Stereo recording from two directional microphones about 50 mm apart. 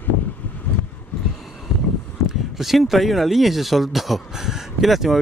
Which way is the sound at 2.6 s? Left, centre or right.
Centre.